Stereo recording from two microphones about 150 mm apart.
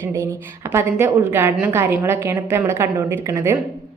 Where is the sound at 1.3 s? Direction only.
15° right (ahead or behind).